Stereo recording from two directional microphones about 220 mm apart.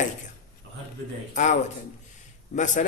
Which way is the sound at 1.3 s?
35° left (ahead or behind).